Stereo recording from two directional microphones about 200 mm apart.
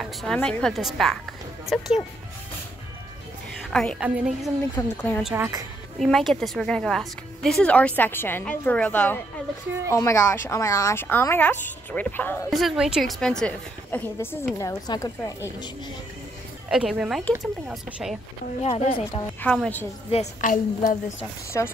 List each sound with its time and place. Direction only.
0.0 s a woman's voice: centre (ahead or behind)
3.7 s a woman's voice: 5° left (ahead or behind)
4.7 s speech: 10° left (ahead or behind)
5.2 s a woman's voice: 10° right (ahead or behind)
5.9 s a woman's voice: centre (ahead or behind); by 15.7 s 15° left (ahead or behind)
16.7 s a woman's voice: 5° right (ahead or behind)
18.6 s a woman's voice: 30° left (ahead or behind)
19.4 s speech: 5° left (ahead or behind)
20.1 s a woman's voice: 35° left (ahead or behind)
21.5 s speech: 15° left (ahead or behind)